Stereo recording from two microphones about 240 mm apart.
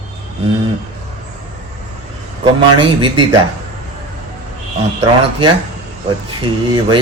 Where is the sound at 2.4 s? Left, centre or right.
Right.